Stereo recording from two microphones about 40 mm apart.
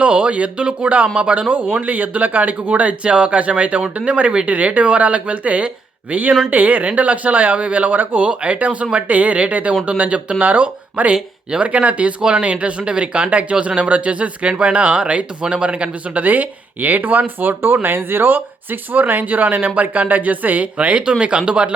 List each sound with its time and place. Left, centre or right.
0.0 s speech: right
1.5 s speech: right
11.1 s speech: right
16.1 s speech: right
17.8 s speech: right